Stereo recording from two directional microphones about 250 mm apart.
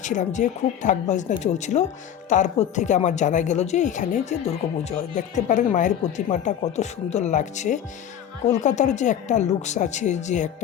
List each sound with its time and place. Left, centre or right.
0.0 s speech: left